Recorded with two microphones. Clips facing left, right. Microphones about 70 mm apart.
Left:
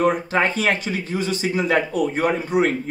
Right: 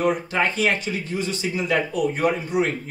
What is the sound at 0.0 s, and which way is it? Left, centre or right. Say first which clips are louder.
Speech: left 3 dB; left.